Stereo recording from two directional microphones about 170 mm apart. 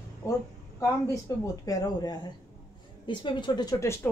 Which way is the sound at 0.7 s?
15° left (ahead or behind).